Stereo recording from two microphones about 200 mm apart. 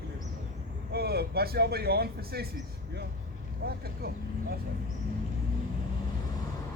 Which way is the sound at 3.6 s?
50° right (ahead or behind).